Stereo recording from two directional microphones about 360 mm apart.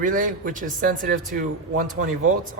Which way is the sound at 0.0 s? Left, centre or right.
Right.